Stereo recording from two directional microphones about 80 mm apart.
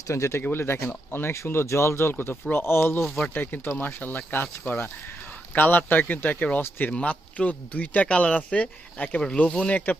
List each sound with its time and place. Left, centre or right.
0.1 s speech: left
3.0 s speech: centre
3.3 s speech: left